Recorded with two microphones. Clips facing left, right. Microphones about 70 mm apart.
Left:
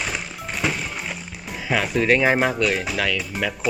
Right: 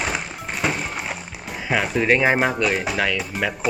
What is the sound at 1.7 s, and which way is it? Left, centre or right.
Speech, centre.